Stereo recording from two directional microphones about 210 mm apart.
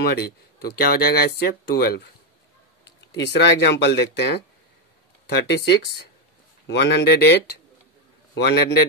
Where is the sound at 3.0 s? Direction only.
55° left (ahead or behind).